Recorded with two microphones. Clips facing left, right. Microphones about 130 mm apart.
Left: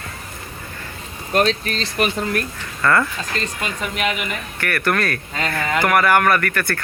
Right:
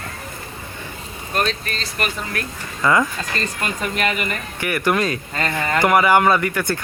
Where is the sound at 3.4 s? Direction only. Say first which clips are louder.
Right 1 dB; centre (ahead or behind).